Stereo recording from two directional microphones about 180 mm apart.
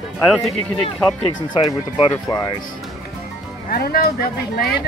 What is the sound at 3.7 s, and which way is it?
Speech, 55° left (ahead or behind).